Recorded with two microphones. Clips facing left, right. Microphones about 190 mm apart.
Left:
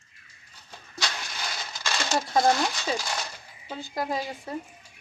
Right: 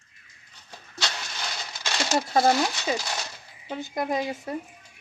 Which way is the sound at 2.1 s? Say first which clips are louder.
Right 1 dB; 25° right (ahead or behind).